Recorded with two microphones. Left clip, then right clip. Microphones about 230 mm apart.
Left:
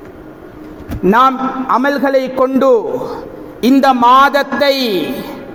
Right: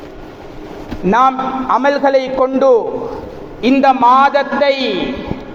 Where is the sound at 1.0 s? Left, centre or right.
Left.